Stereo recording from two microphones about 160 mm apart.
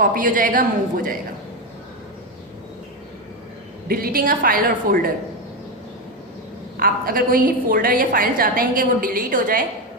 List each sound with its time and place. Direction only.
0.0 s a woman's voice: 60° right (ahead or behind)
3.8 s a woman's voice: 65° right (ahead or behind)
6.7 s a woman's voice: 65° right (ahead or behind)